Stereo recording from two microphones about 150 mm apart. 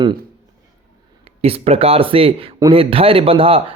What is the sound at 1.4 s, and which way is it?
A man's voice, 40° right (ahead or behind).